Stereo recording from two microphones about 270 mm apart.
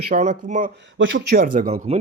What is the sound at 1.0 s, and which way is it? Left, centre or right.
Speech, right.